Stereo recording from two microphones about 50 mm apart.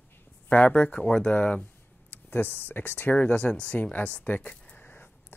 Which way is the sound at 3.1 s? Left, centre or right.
Left.